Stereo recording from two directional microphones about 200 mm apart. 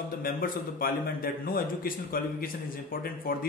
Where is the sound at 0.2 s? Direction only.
45° left (ahead or behind).